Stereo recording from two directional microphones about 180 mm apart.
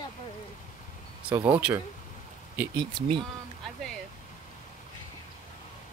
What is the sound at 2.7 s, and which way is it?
Speech, 30° right (ahead or behind).